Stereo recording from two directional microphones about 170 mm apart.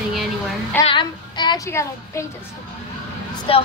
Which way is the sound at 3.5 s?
35° left (ahead or behind).